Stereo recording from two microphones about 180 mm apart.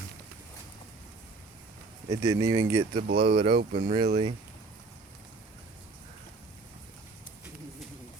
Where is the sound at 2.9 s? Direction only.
60° right (ahead or behind).